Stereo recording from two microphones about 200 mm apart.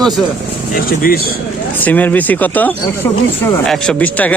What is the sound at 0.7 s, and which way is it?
Speech, 45° left (ahead or behind).